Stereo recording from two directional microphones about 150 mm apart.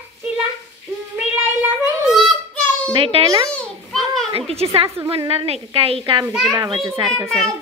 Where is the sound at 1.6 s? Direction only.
Centre (ahead or behind).